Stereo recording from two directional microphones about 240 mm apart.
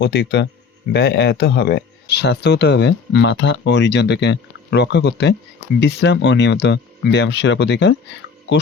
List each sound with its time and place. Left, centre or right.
0.0 s speech: left